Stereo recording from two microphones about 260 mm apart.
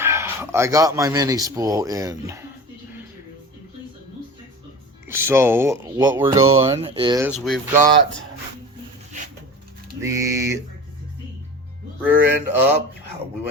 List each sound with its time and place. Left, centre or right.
0.0 s speech: centre
5.0 s speech: centre
6.6 s speech: right
7.3 s mantra: centre
10.0 s speech: centre
12.0 s mantra: centre